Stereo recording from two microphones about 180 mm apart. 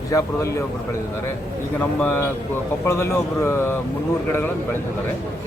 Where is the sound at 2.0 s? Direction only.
10° left (ahead or behind).